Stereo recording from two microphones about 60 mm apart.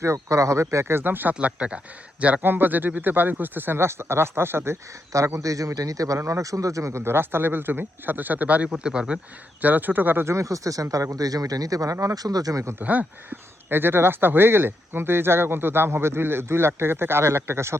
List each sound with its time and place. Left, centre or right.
0.0 s speech: right; by 1.8 s centre
2.4 s speech: right
5.1 s speech: right
6.1 s speech: right
6.4 s speech: right; by 9.1 s centre
9.6 s speech: right
10.2 s speech: right
12.1 s speech: right
12.8 s speech: right
13.7 s speech: right